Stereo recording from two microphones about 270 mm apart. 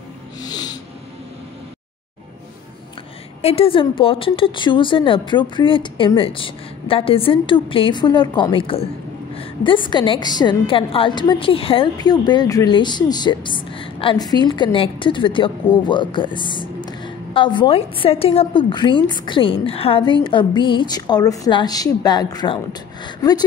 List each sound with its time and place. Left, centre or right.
0.4 s music: centre
3.4 s a woman's voice: left